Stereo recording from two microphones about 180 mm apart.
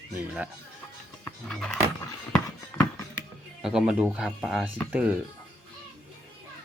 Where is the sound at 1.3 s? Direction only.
5° left (ahead or behind).